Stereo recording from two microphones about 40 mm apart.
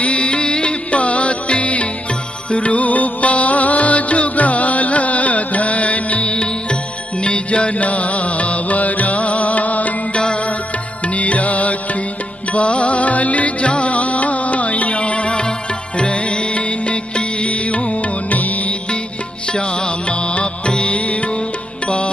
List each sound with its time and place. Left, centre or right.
0.0 s music: left
20.1 s music: left